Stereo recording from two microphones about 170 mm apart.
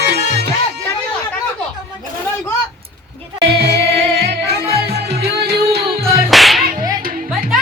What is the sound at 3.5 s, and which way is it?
Music, 75° right (ahead or behind).